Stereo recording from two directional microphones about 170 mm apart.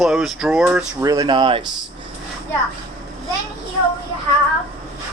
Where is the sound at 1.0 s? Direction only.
20° right (ahead or behind).